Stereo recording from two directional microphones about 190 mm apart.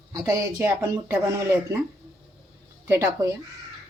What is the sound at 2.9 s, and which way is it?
Speech, 15° right (ahead or behind).